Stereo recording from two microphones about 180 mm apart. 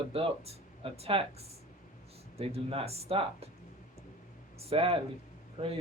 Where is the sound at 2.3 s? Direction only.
30° right (ahead or behind).